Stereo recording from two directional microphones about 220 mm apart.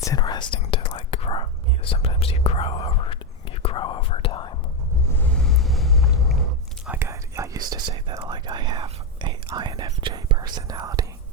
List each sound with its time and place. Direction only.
0.0 s whispering: 15° left (ahead or behind)
5.1 s vehicle: 5° left (ahead or behind)
6.8 s whispering: 10° right (ahead or behind)